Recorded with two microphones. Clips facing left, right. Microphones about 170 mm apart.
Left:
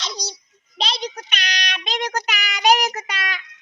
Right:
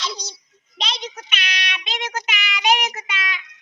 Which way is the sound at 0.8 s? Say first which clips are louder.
Left 4 dB; 35° left (ahead or behind).